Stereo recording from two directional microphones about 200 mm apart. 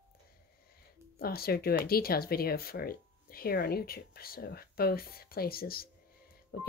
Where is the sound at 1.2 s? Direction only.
50° left (ahead or behind).